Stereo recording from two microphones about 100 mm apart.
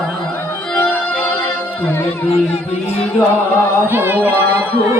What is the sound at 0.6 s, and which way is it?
Music, 15° left (ahead or behind).